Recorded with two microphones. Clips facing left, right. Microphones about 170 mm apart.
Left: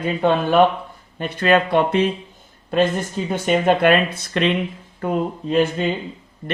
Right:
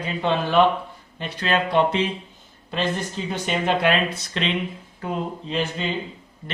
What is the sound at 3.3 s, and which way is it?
Speech, 50° left (ahead or behind).